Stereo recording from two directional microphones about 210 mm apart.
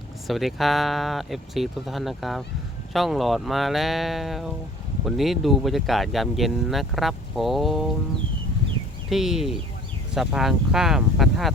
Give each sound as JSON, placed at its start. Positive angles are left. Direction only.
{"t": 0.3, "sound": "speech", "side_deg": 0}
{"t": 9.0, "sound": "speech", "side_deg": 0}